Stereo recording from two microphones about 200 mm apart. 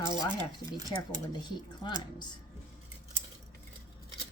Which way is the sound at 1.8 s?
20° left (ahead or behind).